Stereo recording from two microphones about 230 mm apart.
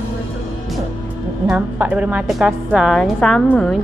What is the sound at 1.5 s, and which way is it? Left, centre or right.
A woman's voice, centre.